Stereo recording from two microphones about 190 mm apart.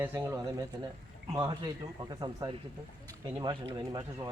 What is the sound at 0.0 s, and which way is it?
Speech, 15° right (ahead or behind).